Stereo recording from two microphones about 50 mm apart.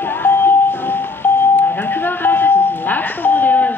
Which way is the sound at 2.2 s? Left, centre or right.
Left.